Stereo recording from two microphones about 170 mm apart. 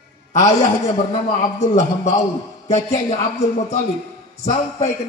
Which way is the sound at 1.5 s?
40° left (ahead or behind).